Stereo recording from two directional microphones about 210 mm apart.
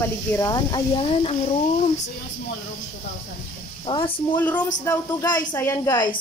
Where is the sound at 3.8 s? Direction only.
25° left (ahead or behind).